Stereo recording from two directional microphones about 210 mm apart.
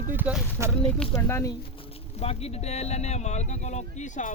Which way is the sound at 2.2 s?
30° left (ahead or behind).